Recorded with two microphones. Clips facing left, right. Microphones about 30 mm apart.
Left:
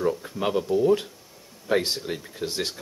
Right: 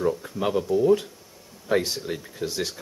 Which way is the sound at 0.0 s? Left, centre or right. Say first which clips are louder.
Even; centre.